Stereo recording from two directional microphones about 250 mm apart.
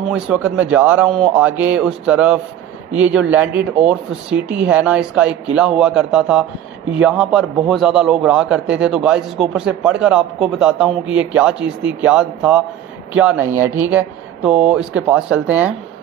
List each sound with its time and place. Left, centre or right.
0.1 s a man's voice: centre